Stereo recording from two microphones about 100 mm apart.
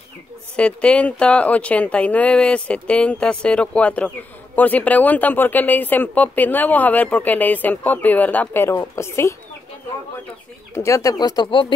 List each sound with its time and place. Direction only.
0.6 s a woman's voice: 10° left (ahead or behind); by 9.3 s 30° left (ahead or behind)
10.7 s speech: 30° left (ahead or behind)